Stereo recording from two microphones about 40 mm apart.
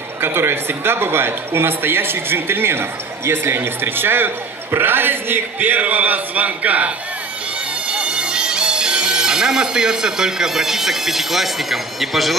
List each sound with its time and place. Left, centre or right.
0.2 s a man's voice: right
7.9 s speech: right; by 12.4 s centre